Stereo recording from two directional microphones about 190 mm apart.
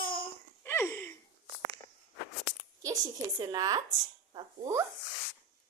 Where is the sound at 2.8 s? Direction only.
15° right (ahead or behind).